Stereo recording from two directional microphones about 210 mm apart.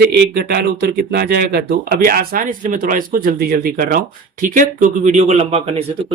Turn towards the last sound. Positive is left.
turn(degrees=-30)  # may be behind; listen again after turning